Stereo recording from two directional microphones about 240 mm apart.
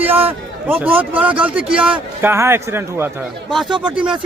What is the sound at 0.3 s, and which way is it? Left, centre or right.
A man's voice, centre.